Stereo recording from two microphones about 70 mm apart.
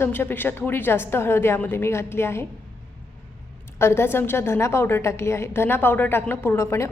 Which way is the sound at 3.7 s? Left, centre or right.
Left.